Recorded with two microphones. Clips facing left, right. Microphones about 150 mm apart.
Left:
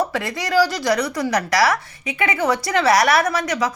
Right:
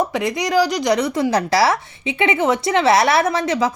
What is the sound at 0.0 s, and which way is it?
A woman's voice, 20° right (ahead or behind).